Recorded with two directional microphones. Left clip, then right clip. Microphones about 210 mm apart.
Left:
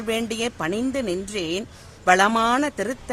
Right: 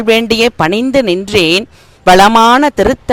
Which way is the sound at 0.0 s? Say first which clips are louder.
Right 16 dB; 40° right (ahead or behind).